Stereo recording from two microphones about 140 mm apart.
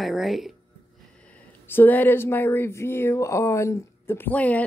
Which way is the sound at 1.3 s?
15° left (ahead or behind).